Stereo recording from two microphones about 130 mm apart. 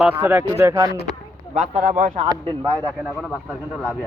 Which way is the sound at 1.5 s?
70° right (ahead or behind).